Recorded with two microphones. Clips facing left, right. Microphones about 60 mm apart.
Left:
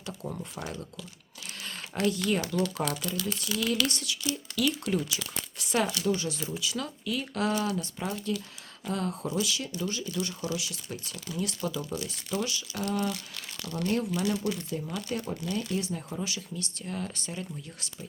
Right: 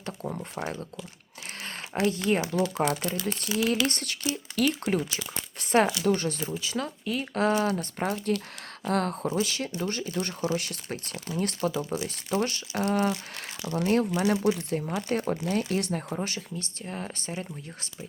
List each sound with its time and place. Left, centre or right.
0.1 s speech: right
0.5 s speech: right
1.9 s speech: right
2.8 s speech: right
5.5 s a sound: right
6.1 s speech: right
9.2 s speech: right
11.8 s speech: right
12.0 s speech: right
13.6 s speech: centre; by 15.4 s right
15.4 s speech: right
16.1 s speech: right